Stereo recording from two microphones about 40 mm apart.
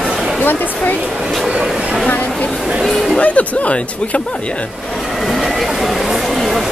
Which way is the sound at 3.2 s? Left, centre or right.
Left.